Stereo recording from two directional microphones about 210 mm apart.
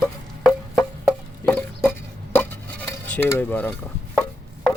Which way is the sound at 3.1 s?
10° left (ahead or behind).